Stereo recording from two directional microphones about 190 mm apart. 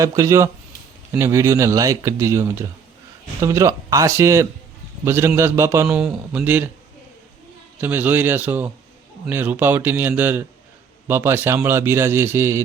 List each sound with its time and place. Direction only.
0.0 s a man's voice: 15° right (ahead or behind)
7.8 s a man's voice: 10° right (ahead or behind)